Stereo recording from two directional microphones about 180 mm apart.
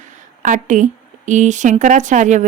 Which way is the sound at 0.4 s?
45° right (ahead or behind).